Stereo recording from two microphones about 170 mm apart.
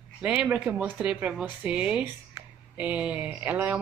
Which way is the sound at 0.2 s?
5° right (ahead or behind).